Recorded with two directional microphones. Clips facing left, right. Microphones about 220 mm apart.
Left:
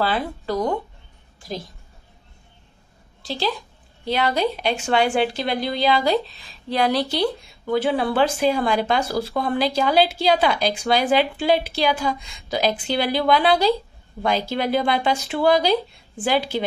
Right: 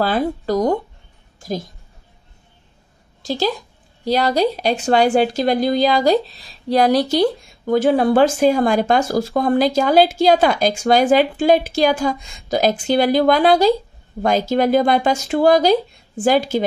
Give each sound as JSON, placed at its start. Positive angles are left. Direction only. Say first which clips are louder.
{"t": 0.0, "sound": "a woman's voice", "louder": "right 5 dB", "side_deg": -45}
{"t": 3.2, "sound": "a woman's voice", "louder": "right 5 dB", "side_deg": -45}